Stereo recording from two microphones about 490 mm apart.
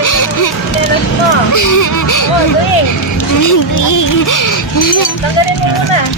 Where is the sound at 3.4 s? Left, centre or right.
Left.